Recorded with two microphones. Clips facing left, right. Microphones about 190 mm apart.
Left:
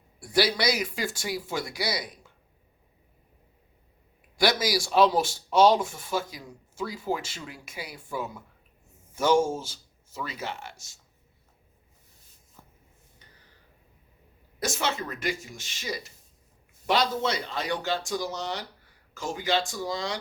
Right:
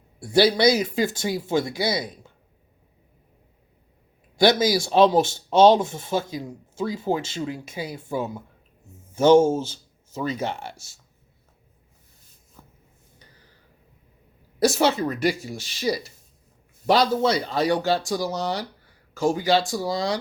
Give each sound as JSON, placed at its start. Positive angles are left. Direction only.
{"t": 0.2, "sound": "speech", "side_deg": -25}
{"t": 4.4, "sound": "speech", "side_deg": -25}
{"t": 14.6, "sound": "speech", "side_deg": -35}